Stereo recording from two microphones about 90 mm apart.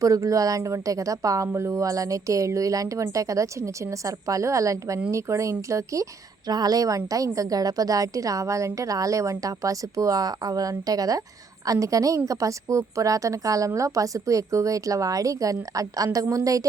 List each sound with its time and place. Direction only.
0.0 s speech: 40° right (ahead or behind)